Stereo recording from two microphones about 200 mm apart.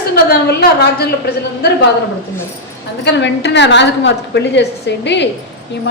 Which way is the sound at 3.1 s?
60° left (ahead or behind).